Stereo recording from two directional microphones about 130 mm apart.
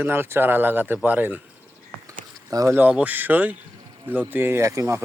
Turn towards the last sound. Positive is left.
turn(degrees=-25)  # may be behind; listen again after turning